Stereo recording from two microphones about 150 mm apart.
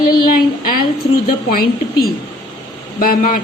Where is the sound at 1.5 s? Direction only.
80° left.